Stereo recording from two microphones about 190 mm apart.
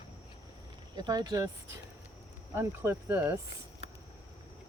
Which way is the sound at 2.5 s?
15° right (ahead or behind).